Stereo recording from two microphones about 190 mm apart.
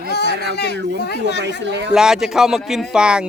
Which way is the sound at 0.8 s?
65° right (ahead or behind).